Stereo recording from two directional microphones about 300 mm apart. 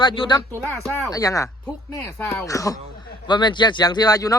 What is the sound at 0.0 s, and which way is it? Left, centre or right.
Speech, centre.